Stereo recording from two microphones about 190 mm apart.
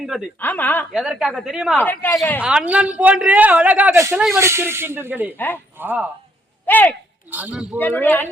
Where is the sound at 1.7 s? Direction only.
10° left (ahead or behind).